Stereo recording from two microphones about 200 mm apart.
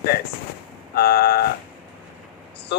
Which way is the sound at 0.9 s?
50° left (ahead or behind).